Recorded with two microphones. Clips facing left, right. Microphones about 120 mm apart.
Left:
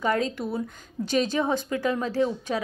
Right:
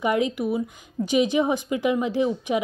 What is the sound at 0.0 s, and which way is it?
A woman's voice, 15° right (ahead or behind).